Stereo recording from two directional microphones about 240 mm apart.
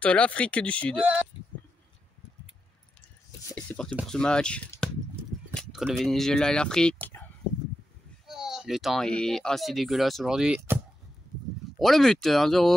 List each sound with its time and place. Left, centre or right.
0.0 s speech: centre
3.4 s speech: centre
8.3 s speech: centre
11.8 s speech: centre